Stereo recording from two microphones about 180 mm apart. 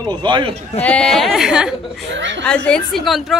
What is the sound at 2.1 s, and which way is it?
Speech, 90° right.